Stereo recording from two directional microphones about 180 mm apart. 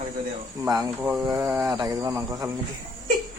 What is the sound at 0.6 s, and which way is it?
Speech, 15° right (ahead or behind).